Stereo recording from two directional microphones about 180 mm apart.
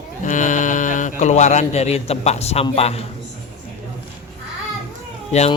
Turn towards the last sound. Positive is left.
turn(degrees=35)  # may be behind; listen again after turning